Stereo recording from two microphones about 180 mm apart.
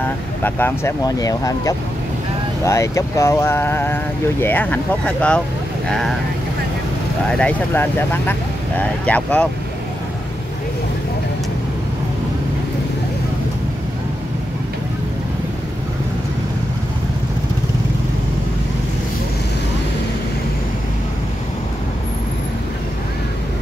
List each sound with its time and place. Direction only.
0.4 s speech: 10° left (ahead or behind)
7.2 s speech: 5° left (ahead or behind)